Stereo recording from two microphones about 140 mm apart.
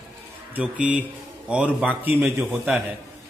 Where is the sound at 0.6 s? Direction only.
10° right (ahead or behind).